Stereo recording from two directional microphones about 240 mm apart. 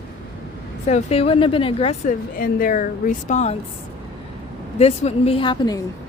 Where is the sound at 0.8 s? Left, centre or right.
Left.